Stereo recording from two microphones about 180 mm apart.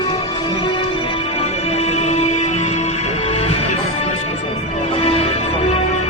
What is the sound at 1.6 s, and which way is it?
Music, 35° left (ahead or behind).